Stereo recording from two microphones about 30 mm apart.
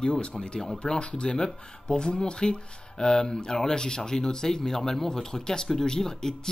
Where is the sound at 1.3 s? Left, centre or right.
Left.